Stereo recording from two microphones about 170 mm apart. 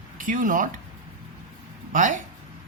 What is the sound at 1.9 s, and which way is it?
Speech, 50° right (ahead or behind).